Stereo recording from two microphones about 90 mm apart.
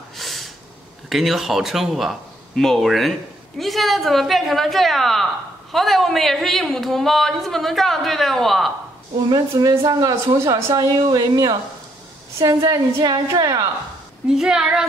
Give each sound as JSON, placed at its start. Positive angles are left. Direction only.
{"t": 0.1, "sound": "a sound", "side_deg": 0}
{"t": 1.0, "sound": "speech", "side_deg": 0}
{"t": 9.6, "sound": "a woman's voice", "side_deg": -45}
{"t": 14.3, "sound": "a woman's voice", "side_deg": -5}